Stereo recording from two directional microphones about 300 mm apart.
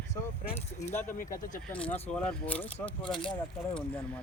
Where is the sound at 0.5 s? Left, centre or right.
Left.